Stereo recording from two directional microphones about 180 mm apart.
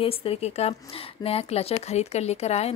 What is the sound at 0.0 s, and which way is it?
Speech, 30° left (ahead or behind).